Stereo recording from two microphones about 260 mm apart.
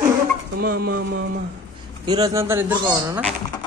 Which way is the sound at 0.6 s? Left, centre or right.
Right.